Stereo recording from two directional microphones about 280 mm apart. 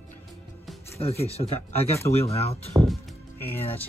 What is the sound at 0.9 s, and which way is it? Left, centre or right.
Speech, left.